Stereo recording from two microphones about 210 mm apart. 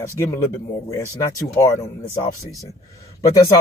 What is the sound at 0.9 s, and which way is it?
Speech, 15° left (ahead or behind).